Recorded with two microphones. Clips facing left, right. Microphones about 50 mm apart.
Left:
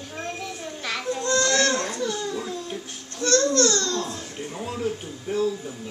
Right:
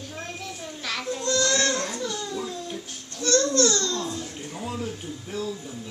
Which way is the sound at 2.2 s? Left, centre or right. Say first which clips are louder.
Left 2 dB; centre.